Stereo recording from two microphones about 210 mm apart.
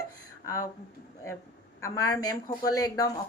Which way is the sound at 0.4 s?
15° left (ahead or behind).